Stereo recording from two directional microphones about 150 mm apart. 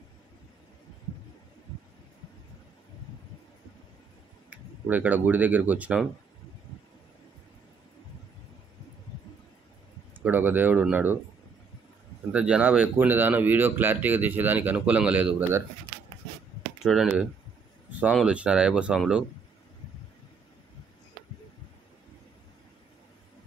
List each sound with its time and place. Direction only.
4.5 s speech: 10° right (ahead or behind)
10.2 s speech: 10° right (ahead or behind)
12.3 s speech: 10° right (ahead or behind)
16.8 s speech: centre (ahead or behind)